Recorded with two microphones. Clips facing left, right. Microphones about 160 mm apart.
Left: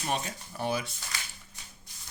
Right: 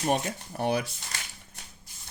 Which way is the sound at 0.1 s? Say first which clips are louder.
Right 4 dB; 55° right (ahead or behind).